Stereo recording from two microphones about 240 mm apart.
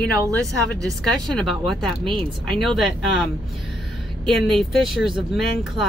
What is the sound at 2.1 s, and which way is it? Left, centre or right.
Speech, centre.